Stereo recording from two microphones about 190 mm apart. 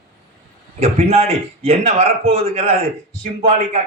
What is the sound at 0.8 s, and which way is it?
A man's voice, 35° right (ahead or behind).